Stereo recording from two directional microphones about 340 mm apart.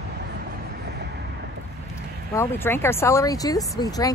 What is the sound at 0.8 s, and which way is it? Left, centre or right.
Vehicle, right.